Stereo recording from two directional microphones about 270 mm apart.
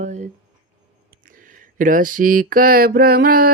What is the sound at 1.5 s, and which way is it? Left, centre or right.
Mantra, right.